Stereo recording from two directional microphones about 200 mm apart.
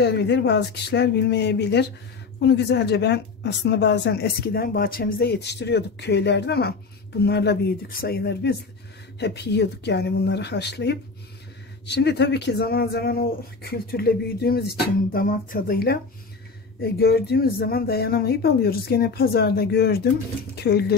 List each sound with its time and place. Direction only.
0.0 s speech: 60° left (ahead or behind)